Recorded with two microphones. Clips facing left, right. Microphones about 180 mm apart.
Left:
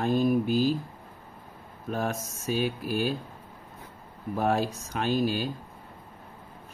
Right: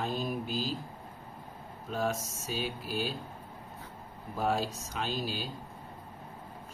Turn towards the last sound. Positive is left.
turn(degrees=55)  # may be behind; listen again after turning